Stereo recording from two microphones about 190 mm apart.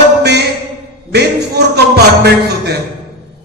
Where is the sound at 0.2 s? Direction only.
60° right (ahead or behind).